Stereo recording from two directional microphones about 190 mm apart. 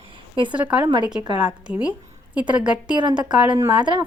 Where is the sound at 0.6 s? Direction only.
5° right (ahead or behind).